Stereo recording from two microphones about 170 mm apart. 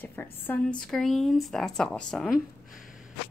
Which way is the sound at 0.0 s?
10° left (ahead or behind).